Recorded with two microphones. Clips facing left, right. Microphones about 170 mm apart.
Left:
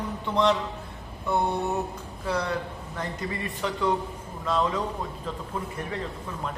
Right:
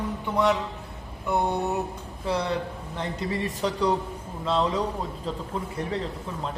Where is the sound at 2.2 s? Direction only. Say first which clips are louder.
Right 2 dB; 30° right (ahead or behind).